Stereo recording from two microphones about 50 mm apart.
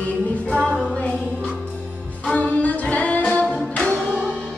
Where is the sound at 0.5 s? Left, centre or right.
Centre.